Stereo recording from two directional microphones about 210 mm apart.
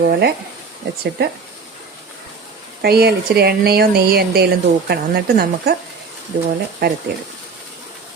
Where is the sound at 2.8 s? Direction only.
50° right (ahead or behind).